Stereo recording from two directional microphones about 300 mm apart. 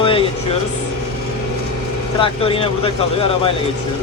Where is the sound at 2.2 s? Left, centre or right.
Centre.